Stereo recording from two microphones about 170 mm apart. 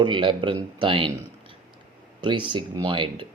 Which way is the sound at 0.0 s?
30° right (ahead or behind).